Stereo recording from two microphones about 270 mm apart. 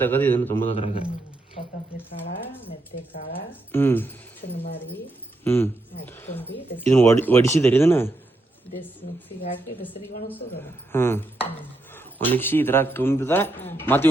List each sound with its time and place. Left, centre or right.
0.0 s speech: centre
0.7 s a man's voice: left
2.9 s speech: left
3.7 s speech: centre
10.2 s speech: centre